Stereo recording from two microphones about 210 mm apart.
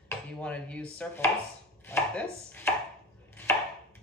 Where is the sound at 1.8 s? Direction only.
10° left (ahead or behind).